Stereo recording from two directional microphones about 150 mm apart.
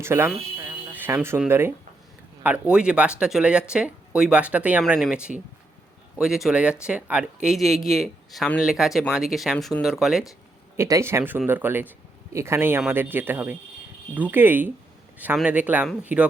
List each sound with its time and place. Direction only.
0.0 s speech: 15° right (ahead or behind)
10.8 s speech: 20° right (ahead or behind)